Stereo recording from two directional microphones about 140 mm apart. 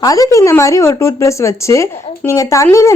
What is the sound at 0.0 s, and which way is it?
A woman's voice, 25° left (ahead or behind).